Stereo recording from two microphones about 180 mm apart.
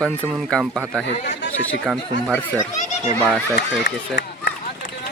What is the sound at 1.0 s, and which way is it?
Speech, 80° left.